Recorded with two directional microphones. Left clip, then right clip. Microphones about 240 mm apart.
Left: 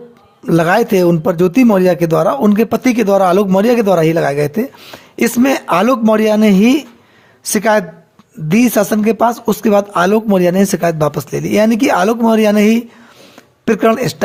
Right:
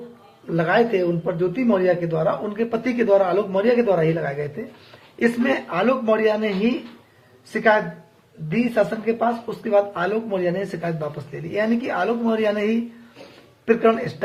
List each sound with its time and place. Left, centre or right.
0.4 s speech: left